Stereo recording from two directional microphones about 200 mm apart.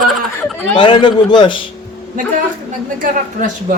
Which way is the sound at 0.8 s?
25° left (ahead or behind).